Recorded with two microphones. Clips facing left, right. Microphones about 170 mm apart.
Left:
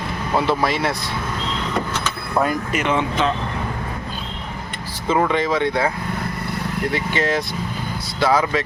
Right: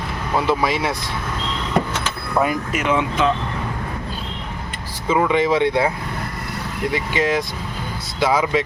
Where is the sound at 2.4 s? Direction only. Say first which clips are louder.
Even; 10° right (ahead or behind).